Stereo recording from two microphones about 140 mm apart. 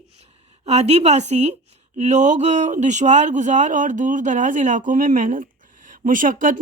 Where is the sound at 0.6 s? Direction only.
50° right (ahead or behind).